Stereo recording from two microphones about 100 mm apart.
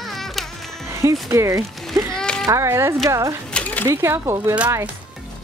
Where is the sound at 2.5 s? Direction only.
30° right (ahead or behind).